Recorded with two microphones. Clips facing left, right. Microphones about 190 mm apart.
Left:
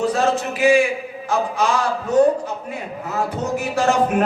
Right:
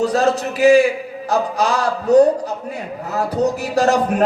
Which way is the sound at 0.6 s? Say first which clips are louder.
Right 4 dB; 35° right (ahead or behind).